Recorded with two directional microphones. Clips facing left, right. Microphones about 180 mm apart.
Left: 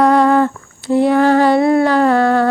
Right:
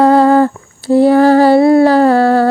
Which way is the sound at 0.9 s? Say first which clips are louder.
Right 4 dB; 35° right (ahead or behind).